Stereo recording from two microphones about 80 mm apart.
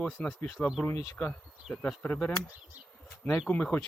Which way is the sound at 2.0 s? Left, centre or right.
Centre.